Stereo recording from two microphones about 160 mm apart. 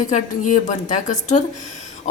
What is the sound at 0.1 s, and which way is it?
A woman's voice, 50° left (ahead or behind).